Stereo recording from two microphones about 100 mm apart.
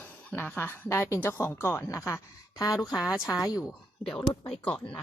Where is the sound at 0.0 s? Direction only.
20° left (ahead or behind); by 2.9 s 35° left (ahead or behind).